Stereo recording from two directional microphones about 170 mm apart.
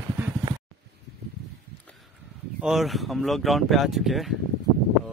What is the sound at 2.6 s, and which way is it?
Speech, centre (ahead or behind).